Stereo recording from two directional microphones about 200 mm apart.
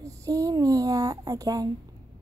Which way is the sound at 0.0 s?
15° right (ahead or behind).